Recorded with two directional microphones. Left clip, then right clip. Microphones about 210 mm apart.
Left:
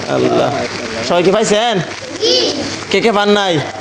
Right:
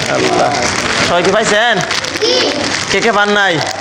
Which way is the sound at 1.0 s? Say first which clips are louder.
Left 2 dB; 35° left (ahead or behind).